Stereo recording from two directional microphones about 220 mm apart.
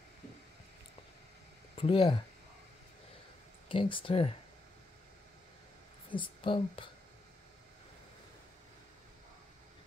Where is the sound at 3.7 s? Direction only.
25° left (ahead or behind).